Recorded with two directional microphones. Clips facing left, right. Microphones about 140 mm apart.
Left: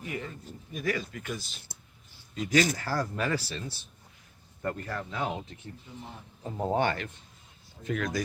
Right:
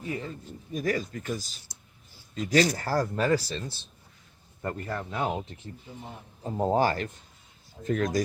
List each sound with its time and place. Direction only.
0.0 s speech: 30° right (ahead or behind)
3.5 s speech: 30° right (ahead or behind)